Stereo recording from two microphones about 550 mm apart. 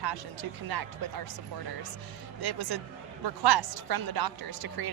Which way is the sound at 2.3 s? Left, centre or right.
Right.